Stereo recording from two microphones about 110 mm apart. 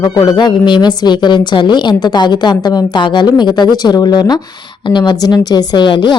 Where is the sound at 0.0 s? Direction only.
45° left (ahead or behind).